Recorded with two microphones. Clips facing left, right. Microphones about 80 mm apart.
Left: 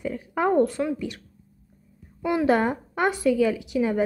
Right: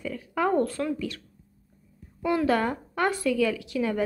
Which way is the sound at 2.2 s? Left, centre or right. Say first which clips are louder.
Left 3 dB; centre.